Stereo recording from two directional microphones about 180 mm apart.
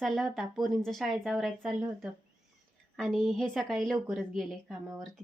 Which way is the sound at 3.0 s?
Centre (ahead or behind).